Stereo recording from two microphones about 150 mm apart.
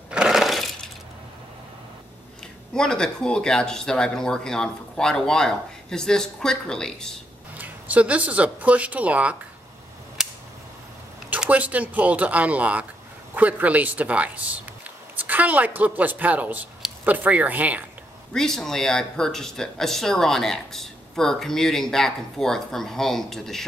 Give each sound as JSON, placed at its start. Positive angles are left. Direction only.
{"t": 0.1, "sound": "a sound", "side_deg": -5}
{"t": 2.7, "sound": "speech", "side_deg": 5}
{"t": 7.5, "sound": "speech", "side_deg": -10}
{"t": 10.2, "sound": "a sound", "side_deg": -5}
{"t": 11.2, "sound": "a woman's voice", "side_deg": -10}
{"t": 18.3, "sound": "speech", "side_deg": 5}